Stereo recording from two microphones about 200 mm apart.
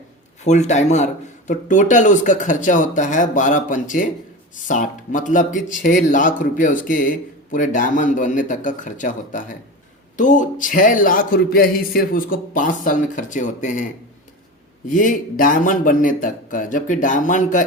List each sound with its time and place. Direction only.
0.4 s a man's voice: 35° left (ahead or behind)
14.8 s a man's voice: 40° left (ahead or behind)